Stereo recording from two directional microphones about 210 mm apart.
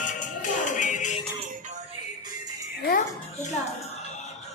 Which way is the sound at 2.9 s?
40° left (ahead or behind).